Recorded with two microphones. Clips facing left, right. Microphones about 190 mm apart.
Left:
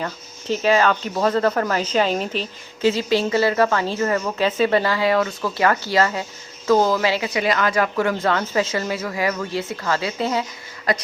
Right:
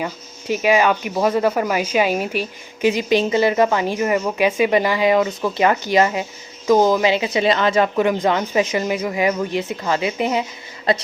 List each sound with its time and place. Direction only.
0.0 s speech: 10° right (ahead or behind)